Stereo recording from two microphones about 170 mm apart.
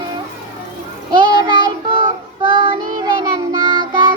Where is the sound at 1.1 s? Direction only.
25° right (ahead or behind).